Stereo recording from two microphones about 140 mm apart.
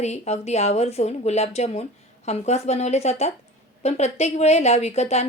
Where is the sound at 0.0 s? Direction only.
50° left (ahead or behind).